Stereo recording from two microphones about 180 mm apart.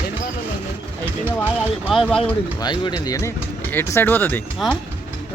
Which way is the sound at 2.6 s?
25° left (ahead or behind).